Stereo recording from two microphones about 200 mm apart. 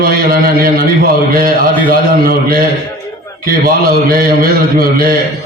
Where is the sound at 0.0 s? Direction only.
45° right (ahead or behind).